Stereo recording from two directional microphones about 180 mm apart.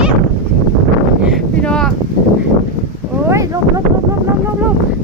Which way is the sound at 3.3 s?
20° right (ahead or behind).